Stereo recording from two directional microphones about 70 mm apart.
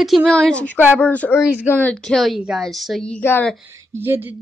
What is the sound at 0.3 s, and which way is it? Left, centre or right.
A woman's voice, centre.